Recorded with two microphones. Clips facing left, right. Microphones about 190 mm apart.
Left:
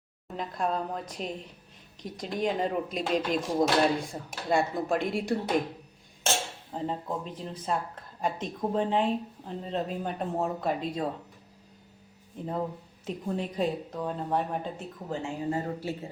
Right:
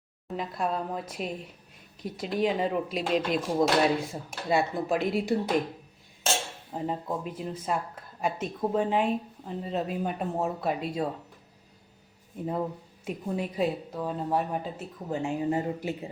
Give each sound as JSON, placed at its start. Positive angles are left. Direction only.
{"t": 0.3, "sound": "speech", "side_deg": -5}
{"t": 6.7, "sound": "speech", "side_deg": -10}
{"t": 12.4, "sound": "speech", "side_deg": -10}
{"t": 15.1, "sound": "speech", "side_deg": -20}